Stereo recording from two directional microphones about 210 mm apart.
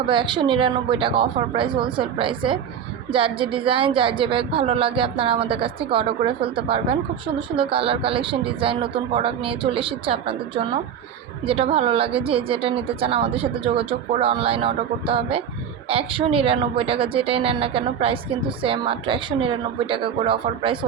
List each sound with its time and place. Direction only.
0.0 s a woman's voice: 25° right (ahead or behind)